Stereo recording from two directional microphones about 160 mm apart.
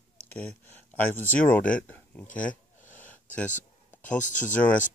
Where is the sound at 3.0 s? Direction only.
10° left (ahead or behind).